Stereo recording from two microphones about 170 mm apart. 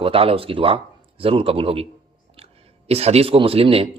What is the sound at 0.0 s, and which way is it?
Speech, 35° right (ahead or behind).